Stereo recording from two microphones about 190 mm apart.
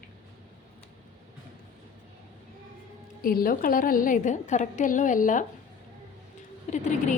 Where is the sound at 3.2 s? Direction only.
50° left (ahead or behind).